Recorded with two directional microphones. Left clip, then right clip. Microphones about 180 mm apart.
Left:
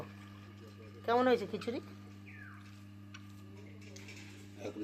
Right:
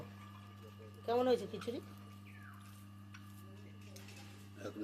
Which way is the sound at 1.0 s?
20° left (ahead or behind).